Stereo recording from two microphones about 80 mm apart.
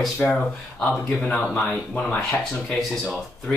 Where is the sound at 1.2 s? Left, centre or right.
Centre.